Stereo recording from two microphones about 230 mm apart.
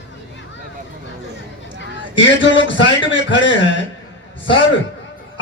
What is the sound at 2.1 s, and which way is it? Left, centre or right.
A man's voice, left.